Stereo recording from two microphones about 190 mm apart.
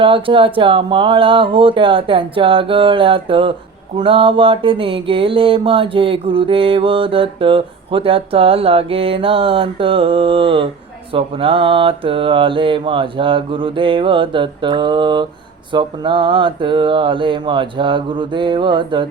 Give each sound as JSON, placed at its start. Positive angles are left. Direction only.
{"t": 0.0, "sound": "mantra", "side_deg": -25}